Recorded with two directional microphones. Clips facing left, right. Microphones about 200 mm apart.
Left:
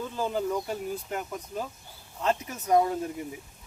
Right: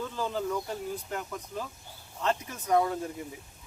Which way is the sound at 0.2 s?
15° left (ahead or behind).